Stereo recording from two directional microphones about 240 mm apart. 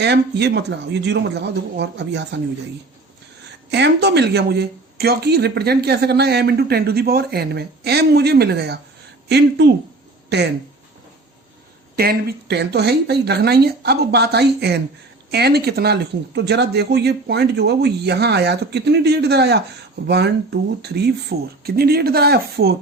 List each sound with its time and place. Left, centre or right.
0.0 s speech: right
3.7 s speech: right
10.2 s speech: right
11.9 s speech: right